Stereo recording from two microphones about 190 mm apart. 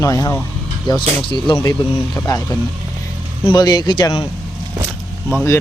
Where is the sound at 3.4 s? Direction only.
20° left (ahead or behind).